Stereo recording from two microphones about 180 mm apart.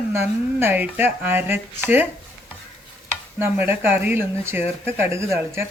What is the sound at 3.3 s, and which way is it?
Speech, 10° right (ahead or behind).